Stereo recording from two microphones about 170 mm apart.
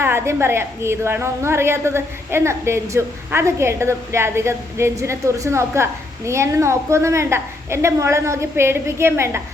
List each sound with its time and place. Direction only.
0.0 s a woman's voice: 15° right (ahead or behind)